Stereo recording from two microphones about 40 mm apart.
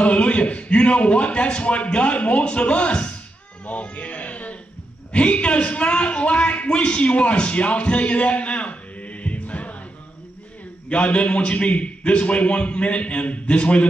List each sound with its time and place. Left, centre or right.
0.0 s a man's voice: left
3.6 s a sound: left
5.1 s a man's voice: left
10.9 s a man's voice: left